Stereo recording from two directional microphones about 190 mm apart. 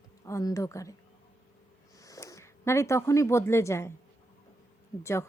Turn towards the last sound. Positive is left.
turn(degrees=15)  # may be behind; listen again after turning